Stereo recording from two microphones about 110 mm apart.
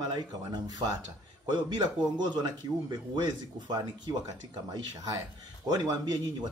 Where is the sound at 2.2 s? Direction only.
40° right (ahead or behind).